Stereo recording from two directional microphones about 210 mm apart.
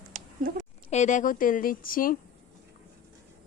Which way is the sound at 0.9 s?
35° left (ahead or behind).